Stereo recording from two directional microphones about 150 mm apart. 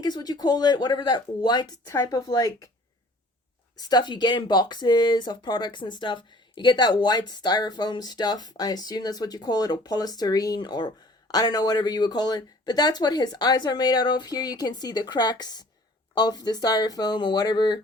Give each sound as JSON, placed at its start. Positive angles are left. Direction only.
{"t": 0.0, "sound": "speech", "side_deg": 25}
{"t": 3.8, "sound": "speech", "side_deg": 25}